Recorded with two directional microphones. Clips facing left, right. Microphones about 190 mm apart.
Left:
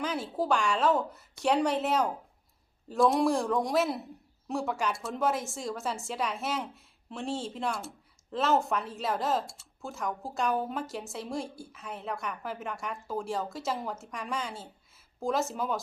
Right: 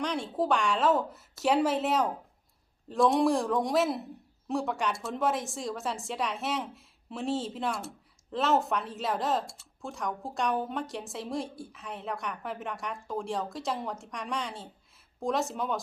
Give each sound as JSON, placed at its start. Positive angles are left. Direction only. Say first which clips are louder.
{"t": 0.0, "sound": "speech", "louder": "right 1 dB", "side_deg": 5}